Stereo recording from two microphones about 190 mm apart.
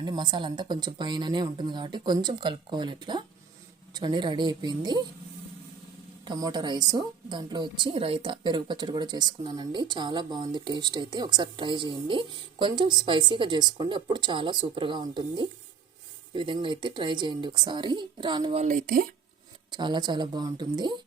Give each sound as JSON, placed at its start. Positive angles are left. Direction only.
{"t": 0.0, "sound": "a woman's voice", "side_deg": -20}
{"t": 6.2, "sound": "a woman's voice", "side_deg": -20}
{"t": 16.3, "sound": "a woman's voice", "side_deg": -25}
{"t": 18.6, "sound": "speech", "side_deg": -45}
{"t": 19.7, "sound": "a woman's voice", "side_deg": -25}